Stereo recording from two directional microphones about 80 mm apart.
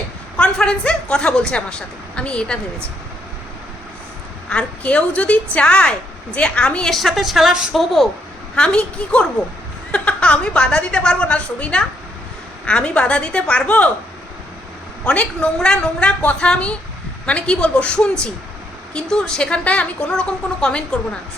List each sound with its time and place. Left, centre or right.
0.3 s a woman's voice: centre
4.4 s a woman's voice: centre
8.5 s a woman's voice: centre
15.0 s a woman's voice: centre